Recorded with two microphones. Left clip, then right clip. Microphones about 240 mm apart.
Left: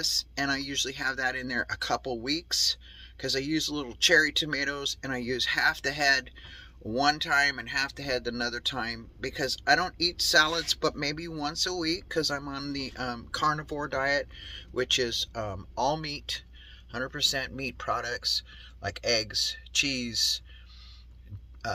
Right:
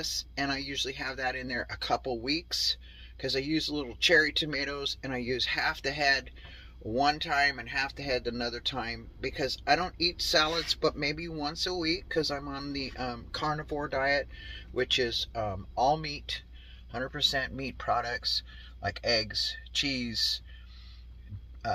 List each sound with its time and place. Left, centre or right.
0.0 s speech: centre